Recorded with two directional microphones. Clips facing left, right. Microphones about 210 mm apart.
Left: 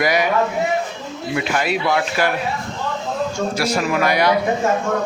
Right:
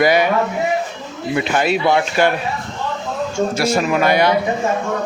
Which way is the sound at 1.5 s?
25° right (ahead or behind).